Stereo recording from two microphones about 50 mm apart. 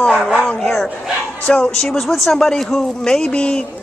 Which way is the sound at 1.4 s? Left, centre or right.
Left.